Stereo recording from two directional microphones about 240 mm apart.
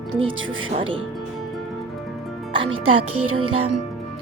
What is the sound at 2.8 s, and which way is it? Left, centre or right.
Music, right.